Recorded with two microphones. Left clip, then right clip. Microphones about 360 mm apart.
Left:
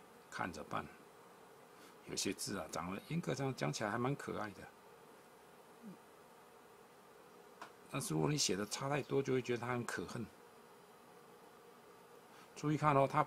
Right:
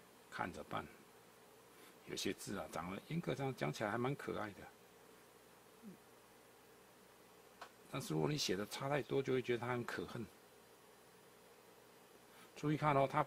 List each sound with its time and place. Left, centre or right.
0.3 s speech: right
2.0 s speech: right
7.9 s speech: right
12.5 s speech: right